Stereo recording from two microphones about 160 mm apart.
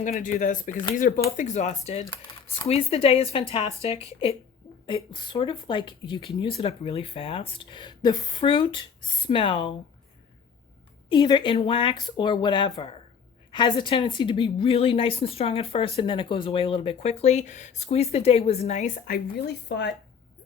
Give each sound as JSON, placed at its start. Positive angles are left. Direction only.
{"t": 0.0, "sound": "a woman's voice", "side_deg": 50}
{"t": 11.1, "sound": "a woman's voice", "side_deg": 30}